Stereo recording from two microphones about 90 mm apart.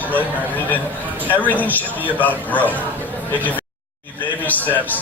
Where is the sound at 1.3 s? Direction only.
20° left (ahead or behind).